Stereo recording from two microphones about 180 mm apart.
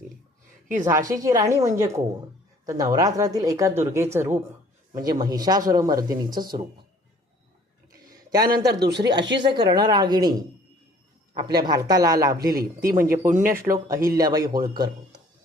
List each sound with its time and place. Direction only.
0.9 s a woman's voice: 15° right (ahead or behind)
8.5 s speech: 60° right (ahead or behind)
9.0 s speech: 70° right (ahead or behind)
9.4 s a woman's voice: 25° right (ahead or behind)